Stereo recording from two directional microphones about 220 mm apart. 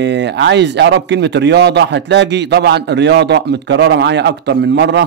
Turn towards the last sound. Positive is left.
turn(degrees=-55)  # may be behind; listen again after turning